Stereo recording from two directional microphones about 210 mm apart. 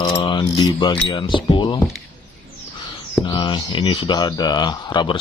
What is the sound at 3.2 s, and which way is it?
Speech, 20° left (ahead or behind).